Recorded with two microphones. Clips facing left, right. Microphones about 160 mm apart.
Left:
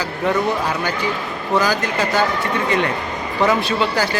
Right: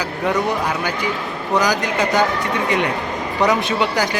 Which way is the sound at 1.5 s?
15° right (ahead or behind).